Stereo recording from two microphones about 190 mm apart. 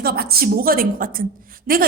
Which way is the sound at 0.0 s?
55° right (ahead or behind).